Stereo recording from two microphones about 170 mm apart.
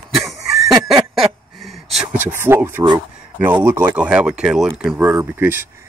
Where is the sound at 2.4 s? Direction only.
15° right (ahead or behind).